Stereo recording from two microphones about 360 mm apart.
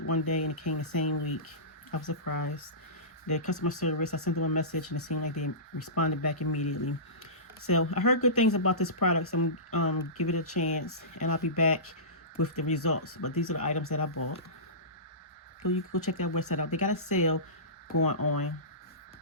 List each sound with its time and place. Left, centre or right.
0.0 s speech: left
15.6 s speech: left